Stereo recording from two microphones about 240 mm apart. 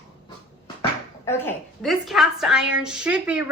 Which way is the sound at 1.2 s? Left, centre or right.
Centre.